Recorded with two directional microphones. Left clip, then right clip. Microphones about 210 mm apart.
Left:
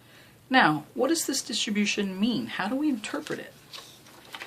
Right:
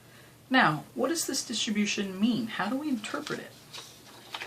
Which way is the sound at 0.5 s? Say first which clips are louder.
Left 3 dB; 50° left (ahead or behind).